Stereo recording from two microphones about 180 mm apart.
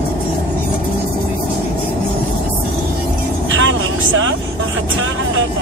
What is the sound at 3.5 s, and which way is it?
Vehicle, 90° right.